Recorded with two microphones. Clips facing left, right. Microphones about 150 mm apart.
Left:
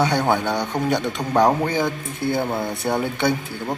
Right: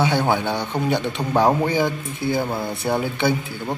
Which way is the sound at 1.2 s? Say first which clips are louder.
Even; 5° right (ahead or behind).